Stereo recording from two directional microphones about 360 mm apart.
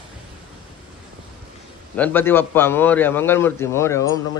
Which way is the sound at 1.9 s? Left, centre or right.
Centre.